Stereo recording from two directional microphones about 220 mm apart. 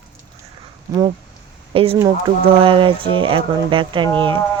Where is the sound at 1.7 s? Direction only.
25° right (ahead or behind).